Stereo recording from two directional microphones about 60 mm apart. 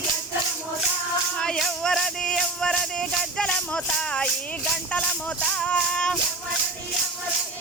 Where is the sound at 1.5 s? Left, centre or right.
Centre.